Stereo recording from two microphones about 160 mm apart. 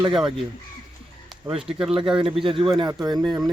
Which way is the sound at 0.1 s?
5° right (ahead or behind).